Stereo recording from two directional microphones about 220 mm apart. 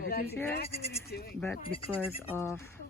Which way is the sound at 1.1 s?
45° left (ahead or behind).